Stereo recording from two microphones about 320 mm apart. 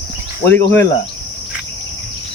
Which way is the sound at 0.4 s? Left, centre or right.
Centre.